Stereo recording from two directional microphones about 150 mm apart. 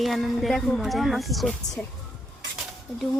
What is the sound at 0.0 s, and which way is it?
A woman's voice, centre (ahead or behind).